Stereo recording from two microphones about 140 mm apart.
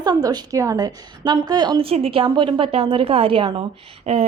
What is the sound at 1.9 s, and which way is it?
A woman's voice, 45° right (ahead or behind).